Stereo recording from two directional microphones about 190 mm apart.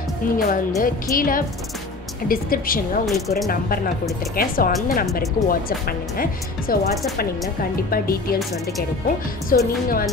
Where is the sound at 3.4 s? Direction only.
50° left (ahead or behind).